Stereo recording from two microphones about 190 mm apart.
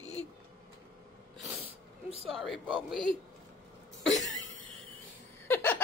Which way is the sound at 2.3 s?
5° right (ahead or behind).